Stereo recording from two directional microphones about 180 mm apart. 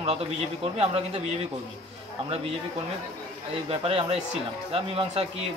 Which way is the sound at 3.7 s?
30° right (ahead or behind).